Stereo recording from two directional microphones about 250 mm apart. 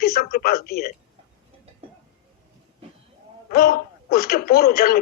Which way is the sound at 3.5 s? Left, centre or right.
Left.